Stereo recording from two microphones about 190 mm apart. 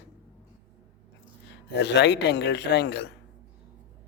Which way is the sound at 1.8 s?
65° left (ahead or behind).